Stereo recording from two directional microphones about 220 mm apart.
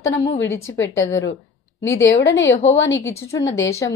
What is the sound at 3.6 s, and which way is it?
Speech, 15° left (ahead or behind).